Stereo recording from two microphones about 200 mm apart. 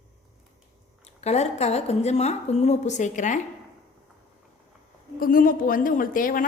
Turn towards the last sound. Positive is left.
turn(degrees=45)  # may be behind; listen again after turning